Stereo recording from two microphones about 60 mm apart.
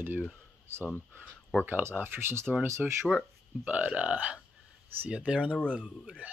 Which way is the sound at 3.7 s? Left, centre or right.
Right.